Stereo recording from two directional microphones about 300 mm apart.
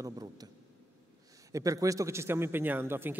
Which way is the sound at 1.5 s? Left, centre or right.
Centre.